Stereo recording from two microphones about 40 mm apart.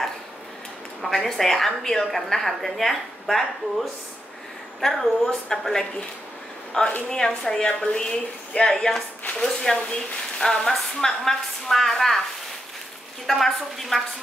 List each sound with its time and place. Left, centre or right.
1.0 s a woman's voice: centre
4.7 s a woman's voice: centre
13.3 s a woman's voice: centre